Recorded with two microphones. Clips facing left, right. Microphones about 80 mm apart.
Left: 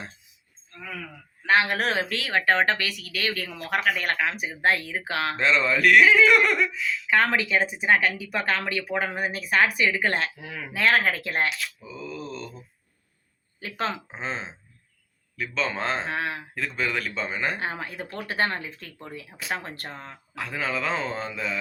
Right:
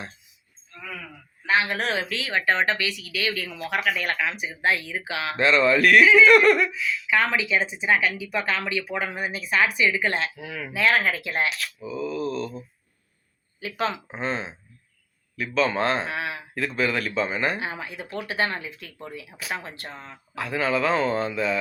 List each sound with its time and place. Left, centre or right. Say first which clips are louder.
1.5 s speech: left 1 dB; left
5.4 s speech: right 4 dB; centre
7.1 s speech: left 1 dB; left
11.5 s mantra: right 4 dB; centre
13.6 s speech: right 2 dB; left
14.1 s speech: right 4 dB; centre
16.0 s speech: left 1 dB; left
16.6 s speech: right 4 dB; centre
17.6 s speech: left 1 dB; left
20.3 s speech: right 5 dB; centre